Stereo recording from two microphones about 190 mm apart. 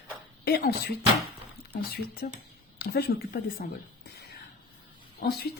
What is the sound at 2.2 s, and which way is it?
Speech, 45° left (ahead or behind).